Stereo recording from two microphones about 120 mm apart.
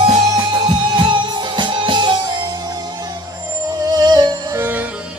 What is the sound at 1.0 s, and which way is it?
Music, 40° right (ahead or behind).